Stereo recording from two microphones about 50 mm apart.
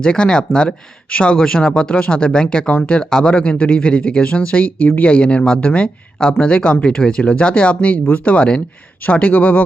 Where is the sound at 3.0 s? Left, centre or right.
Centre.